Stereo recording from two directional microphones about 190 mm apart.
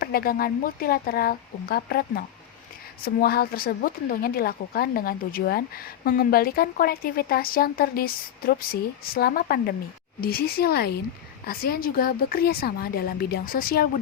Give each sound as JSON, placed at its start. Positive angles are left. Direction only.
{"t": 0.0, "sound": "a woman's voice", "side_deg": 50}